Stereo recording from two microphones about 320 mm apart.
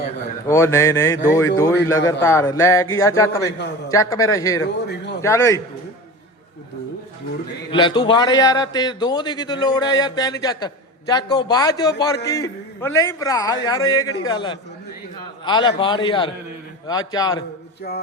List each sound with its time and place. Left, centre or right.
0.4 s a man's voice: centre
4.6 s a man's voice: left
5.2 s a man's voice: centre
7.7 s a man's voice: centre
17.9 s music: left